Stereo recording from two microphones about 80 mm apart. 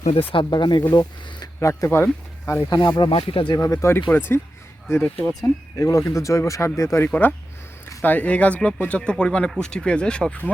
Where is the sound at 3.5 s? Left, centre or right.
Left.